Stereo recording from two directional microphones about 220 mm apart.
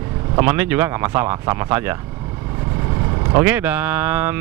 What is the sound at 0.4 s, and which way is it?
A man's voice, 10° right (ahead or behind).